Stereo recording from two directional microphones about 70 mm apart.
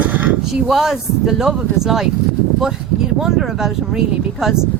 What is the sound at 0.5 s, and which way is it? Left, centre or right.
Speech, centre.